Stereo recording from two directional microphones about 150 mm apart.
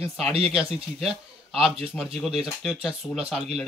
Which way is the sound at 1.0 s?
5° right (ahead or behind).